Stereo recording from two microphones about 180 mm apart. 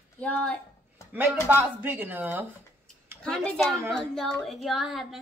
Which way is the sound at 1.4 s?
10° right (ahead or behind).